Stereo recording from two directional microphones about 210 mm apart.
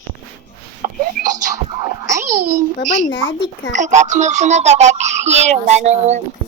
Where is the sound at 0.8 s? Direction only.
35° right (ahead or behind).